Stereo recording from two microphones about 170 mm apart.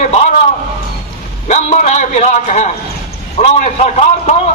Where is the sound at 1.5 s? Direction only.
45° left (ahead or behind).